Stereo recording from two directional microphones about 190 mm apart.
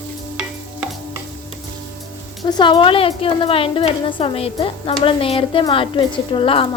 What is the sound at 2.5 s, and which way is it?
A woman's voice, 20° left (ahead or behind).